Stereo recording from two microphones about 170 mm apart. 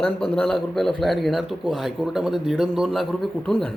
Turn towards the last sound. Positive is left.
turn(degrees=5)  # may be behind; listen again after turning